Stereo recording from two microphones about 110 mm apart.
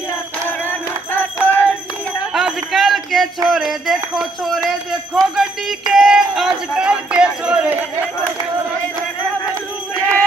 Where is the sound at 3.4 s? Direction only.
Centre (ahead or behind).